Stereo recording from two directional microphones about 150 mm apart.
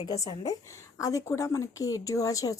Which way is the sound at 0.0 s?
25° left (ahead or behind).